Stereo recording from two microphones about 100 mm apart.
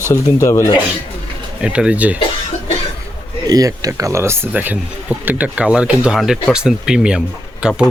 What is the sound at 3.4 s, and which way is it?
Speech, 35° right (ahead or behind).